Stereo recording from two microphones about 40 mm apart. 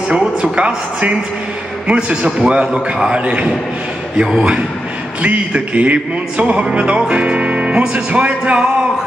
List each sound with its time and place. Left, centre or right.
0.6 s speech: right
5.2 s music: right
7.9 s speech: right